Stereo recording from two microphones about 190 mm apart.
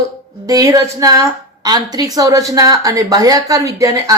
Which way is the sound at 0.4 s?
20° right (ahead or behind).